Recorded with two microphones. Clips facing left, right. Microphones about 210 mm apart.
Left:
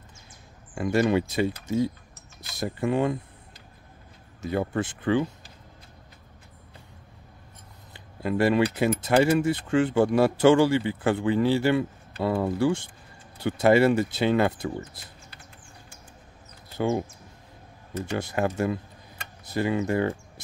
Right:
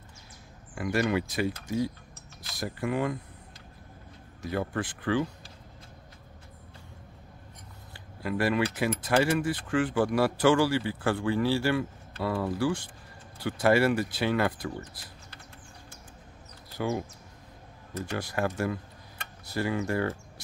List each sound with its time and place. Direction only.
0.7 s speech: 25° left (ahead or behind)
4.4 s speech: 25° left (ahead or behind)
8.2 s speech: 25° left (ahead or behind)
16.7 s speech: 25° left (ahead or behind)
18.1 s speech: 20° left (ahead or behind)